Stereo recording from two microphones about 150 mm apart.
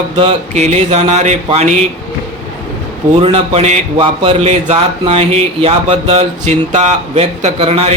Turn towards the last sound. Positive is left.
turn(degrees=-40)  # may be behind; listen again after turning